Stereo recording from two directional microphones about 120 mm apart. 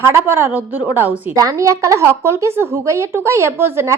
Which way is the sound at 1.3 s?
30° right (ahead or behind).